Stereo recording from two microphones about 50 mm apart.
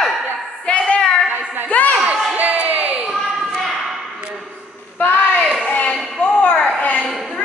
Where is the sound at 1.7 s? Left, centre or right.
Left.